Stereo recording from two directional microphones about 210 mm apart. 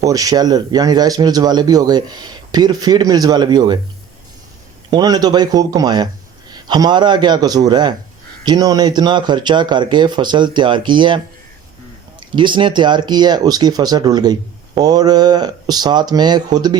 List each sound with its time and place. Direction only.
0.0 s a man's voice: 15° right (ahead or behind)
4.9 s a man's voice: 20° right (ahead or behind)
12.3 s a man's voice: 20° right (ahead or behind)